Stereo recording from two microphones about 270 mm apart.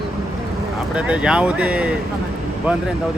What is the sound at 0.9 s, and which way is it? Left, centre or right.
Speech, centre.